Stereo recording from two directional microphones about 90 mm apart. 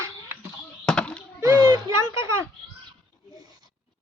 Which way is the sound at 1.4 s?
40° right (ahead or behind).